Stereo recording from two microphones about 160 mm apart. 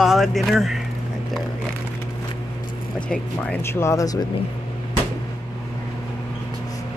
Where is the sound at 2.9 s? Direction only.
5° left (ahead or behind); by 4.2 s 20° left (ahead or behind).